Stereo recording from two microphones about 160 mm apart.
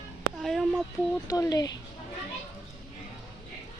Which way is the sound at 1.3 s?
20° left (ahead or behind).